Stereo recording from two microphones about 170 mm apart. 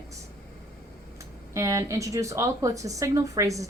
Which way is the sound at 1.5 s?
20° right (ahead or behind).